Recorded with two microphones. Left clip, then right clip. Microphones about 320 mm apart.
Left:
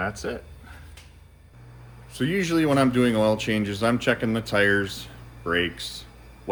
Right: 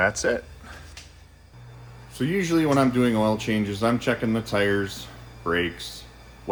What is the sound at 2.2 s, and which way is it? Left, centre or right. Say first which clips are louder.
Speech: even; centre.